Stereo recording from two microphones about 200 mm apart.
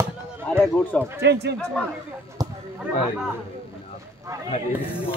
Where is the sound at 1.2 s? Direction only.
55° right (ahead or behind).